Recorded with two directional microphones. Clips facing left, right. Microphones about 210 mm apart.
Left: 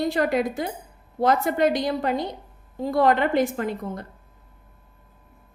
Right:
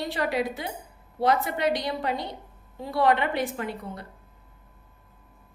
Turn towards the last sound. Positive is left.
turn(degrees=45)  # may be behind; listen again after turning